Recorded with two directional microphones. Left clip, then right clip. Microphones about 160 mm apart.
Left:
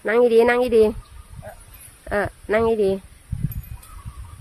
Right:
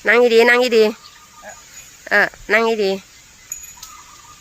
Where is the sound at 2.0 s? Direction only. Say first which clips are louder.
Right 8 dB; 15° left (ahead or behind).